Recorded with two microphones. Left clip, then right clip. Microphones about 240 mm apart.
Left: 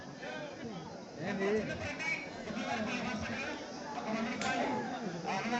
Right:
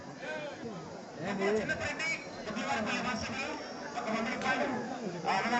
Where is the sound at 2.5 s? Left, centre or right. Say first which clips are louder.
Right 4 dB; right.